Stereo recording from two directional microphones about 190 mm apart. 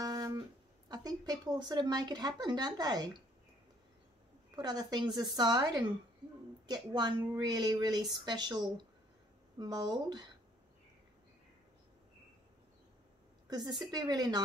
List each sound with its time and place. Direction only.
0.0 s speech: 20° right (ahead or behind)
4.6 s a woman's voice: 20° right (ahead or behind)
13.5 s a woman's voice: 20° right (ahead or behind)